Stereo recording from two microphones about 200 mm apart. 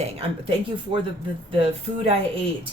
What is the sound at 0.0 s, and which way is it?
Speech, 30° right (ahead or behind).